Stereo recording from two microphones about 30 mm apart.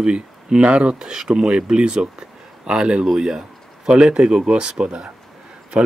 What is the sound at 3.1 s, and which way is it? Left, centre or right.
Speech, right.